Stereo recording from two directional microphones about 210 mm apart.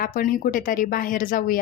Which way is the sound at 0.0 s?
40° left (ahead or behind).